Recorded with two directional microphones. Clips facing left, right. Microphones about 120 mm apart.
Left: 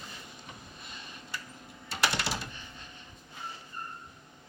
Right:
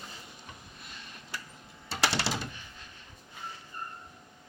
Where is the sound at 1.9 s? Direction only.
30° right (ahead or behind).